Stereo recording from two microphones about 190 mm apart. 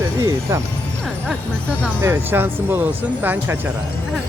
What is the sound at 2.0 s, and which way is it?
Speech, 10° right (ahead or behind).